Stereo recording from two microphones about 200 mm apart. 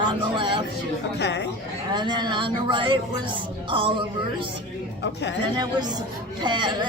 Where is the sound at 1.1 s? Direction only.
55° left (ahead or behind).